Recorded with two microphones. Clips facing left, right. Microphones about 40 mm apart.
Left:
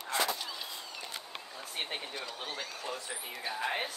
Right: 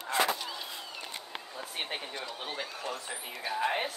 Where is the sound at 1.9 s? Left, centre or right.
Centre.